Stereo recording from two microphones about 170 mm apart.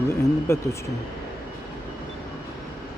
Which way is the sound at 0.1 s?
15° left (ahead or behind).